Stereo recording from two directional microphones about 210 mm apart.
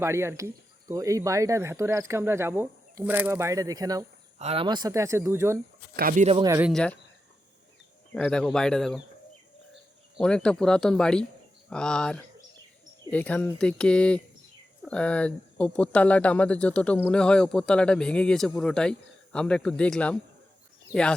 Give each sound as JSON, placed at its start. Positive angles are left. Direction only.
{"t": 0.0, "sound": "speech", "side_deg": -10}
{"t": 4.4, "sound": "speech", "side_deg": -30}
{"t": 6.0, "sound": "speech", "side_deg": -40}
{"t": 6.4, "sound": "speech", "side_deg": -15}
{"t": 6.7, "sound": "speech", "side_deg": 5}
{"t": 8.1, "sound": "speech", "side_deg": 5}
{"t": 10.2, "sound": "speech", "side_deg": 5}